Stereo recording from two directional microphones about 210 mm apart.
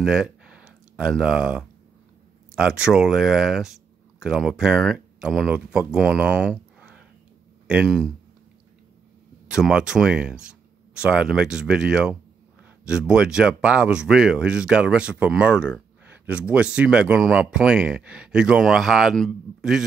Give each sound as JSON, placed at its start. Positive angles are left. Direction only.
{"t": 0.0, "sound": "a sound", "side_deg": -5}
{"t": 2.5, "sound": "speech", "side_deg": -5}
{"t": 9.5, "sound": "speech", "side_deg": -5}